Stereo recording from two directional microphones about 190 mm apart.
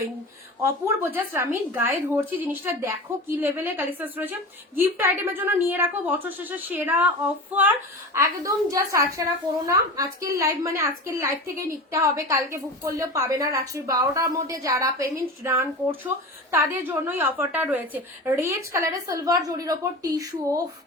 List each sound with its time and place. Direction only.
0.6 s a woman's voice: 10° right (ahead or behind)
8.1 s a woman's voice: 15° right (ahead or behind)